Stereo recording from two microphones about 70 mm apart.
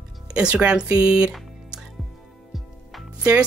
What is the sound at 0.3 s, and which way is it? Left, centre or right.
Speech, centre.